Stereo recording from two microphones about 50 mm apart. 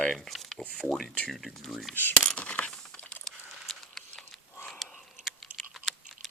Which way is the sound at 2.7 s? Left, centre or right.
Centre.